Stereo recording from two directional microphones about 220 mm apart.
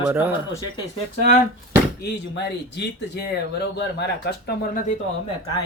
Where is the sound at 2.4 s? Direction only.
50° left (ahead or behind).